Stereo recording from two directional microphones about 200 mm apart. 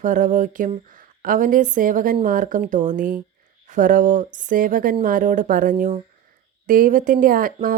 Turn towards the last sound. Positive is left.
turn(degrees=-45)  # may be behind; listen again after turning